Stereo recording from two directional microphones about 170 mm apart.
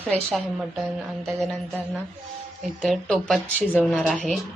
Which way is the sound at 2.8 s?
Centre (ahead or behind).